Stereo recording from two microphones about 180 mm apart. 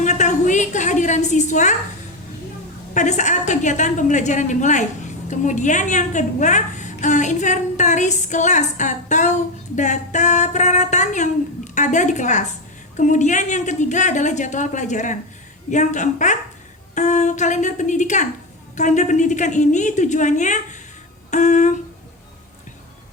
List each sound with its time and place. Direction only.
0.0 s a woman's voice: 40° left (ahead or behind)
2.9 s a woman's voice: 40° left (ahead or behind)
21.2 s humming: 40° left (ahead or behind)